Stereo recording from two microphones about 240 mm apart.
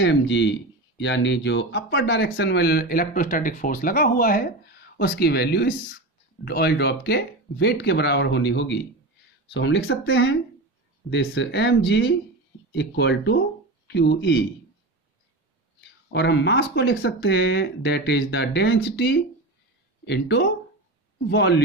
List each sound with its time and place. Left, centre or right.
0.0 s speech: left
16.1 s speech: left